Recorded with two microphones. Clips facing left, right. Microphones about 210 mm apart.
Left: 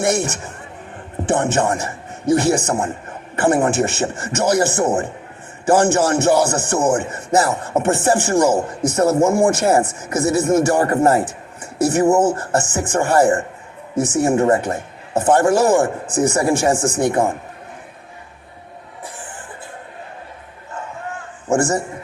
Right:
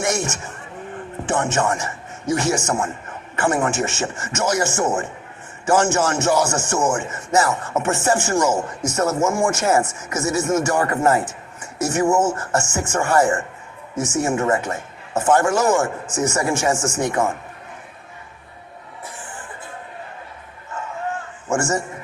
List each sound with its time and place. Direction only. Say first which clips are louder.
0.0 s speech: left 4 dB; 35° left (ahead or behind)
1.2 s a sound: left 4 dB; 35° left (ahead or behind)
1.5 s speech: left 3 dB; 35° left (ahead or behind)
21.4 s a man's voice: left 4 dB; 35° left (ahead or behind)